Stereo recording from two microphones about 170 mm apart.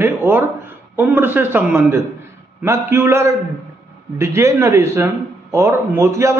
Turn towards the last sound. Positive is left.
turn(degrees=-15)  # may be behind; listen again after turning